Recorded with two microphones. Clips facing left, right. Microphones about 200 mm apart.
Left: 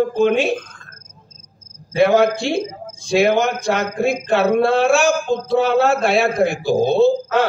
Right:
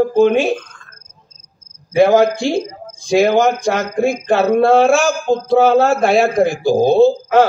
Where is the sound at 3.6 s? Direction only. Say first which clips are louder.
Right 3 dB; 60° left (ahead or behind).